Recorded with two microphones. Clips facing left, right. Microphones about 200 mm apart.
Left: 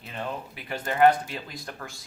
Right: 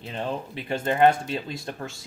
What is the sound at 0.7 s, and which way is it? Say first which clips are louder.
Speech: right 1 dB; 25° right (ahead or behind).